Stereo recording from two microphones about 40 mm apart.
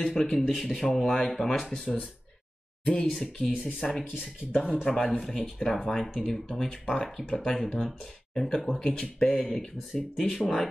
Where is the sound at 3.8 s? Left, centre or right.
Left.